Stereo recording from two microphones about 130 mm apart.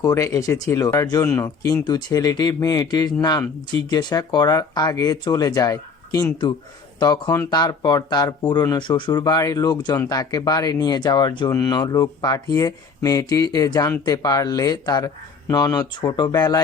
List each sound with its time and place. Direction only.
0.0 s speech: 25° left (ahead or behind)
1.8 s speech: 30° left (ahead or behind)